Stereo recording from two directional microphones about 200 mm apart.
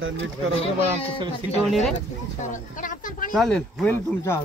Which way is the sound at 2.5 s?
40° left (ahead or behind).